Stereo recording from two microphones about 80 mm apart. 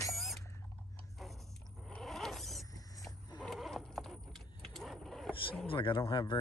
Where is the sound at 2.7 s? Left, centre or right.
Left.